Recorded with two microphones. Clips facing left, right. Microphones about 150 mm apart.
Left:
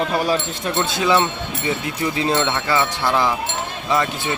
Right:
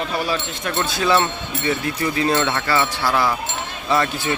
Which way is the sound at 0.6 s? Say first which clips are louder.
Left 1 dB; 20° left (ahead or behind).